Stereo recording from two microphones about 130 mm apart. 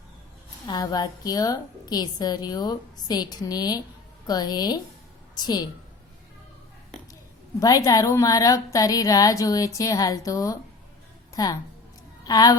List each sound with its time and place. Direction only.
0.7 s a woman's voice: 35° left (ahead or behind)
7.6 s a woman's voice: 25° left (ahead or behind)